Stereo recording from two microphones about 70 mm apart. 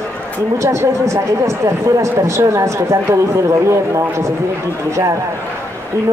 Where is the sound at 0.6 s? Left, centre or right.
Right.